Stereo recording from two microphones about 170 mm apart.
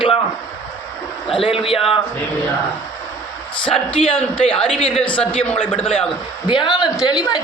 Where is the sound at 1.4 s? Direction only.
35° left (ahead or behind).